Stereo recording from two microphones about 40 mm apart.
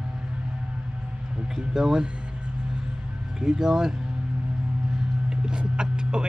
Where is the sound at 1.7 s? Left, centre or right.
Centre.